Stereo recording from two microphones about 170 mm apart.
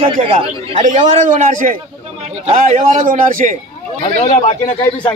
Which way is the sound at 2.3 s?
40° right (ahead or behind).